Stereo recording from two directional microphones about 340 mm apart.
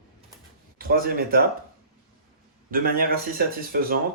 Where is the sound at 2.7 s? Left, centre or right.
Right.